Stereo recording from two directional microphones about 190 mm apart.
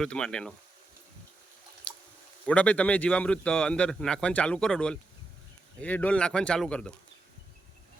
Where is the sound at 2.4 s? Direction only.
5° left (ahead or behind).